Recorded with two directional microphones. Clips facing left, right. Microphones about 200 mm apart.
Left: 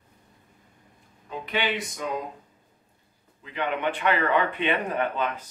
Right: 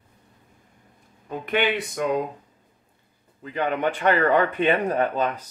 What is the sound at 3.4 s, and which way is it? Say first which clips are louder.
Speech: right 4 dB; 40° right (ahead or behind).